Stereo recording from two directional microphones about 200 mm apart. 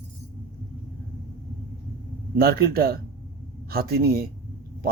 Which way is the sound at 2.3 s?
50° right (ahead or behind).